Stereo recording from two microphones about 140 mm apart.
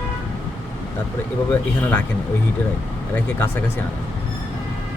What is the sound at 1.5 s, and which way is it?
Speech, 10° left (ahead or behind).